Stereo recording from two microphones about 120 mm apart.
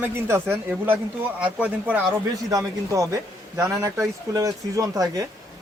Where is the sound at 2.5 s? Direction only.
25° right (ahead or behind).